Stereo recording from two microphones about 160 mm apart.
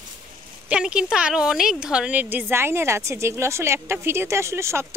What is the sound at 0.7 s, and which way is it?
A woman's voice, 5° right (ahead or behind).